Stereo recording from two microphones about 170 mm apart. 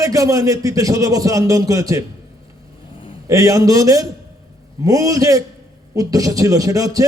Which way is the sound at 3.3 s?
20° right (ahead or behind).